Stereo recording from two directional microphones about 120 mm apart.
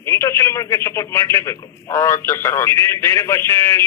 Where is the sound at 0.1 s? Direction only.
20° left (ahead or behind).